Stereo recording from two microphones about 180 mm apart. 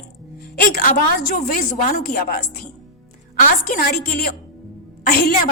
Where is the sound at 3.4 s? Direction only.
50° left (ahead or behind).